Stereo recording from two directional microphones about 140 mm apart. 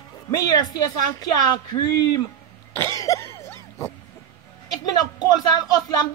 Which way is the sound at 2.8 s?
20° left (ahead or behind).